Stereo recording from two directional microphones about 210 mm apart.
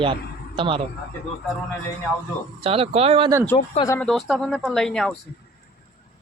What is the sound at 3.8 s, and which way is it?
Speech, 10° left (ahead or behind).